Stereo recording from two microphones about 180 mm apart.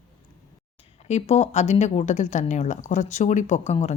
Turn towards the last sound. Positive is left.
turn(degrees=35)  # may be behind; listen again after turning